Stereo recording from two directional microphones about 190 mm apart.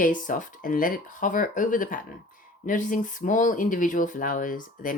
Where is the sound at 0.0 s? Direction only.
45° left (ahead or behind).